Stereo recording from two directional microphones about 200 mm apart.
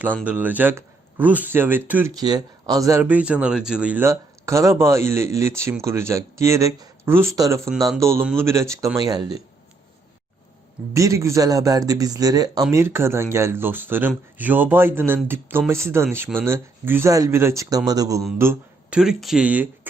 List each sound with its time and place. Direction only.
0.3 s speech: 10° right (ahead or behind)
2.1 s speech: 20° right (ahead or behind)
10.9 s speech: 15° right (ahead or behind)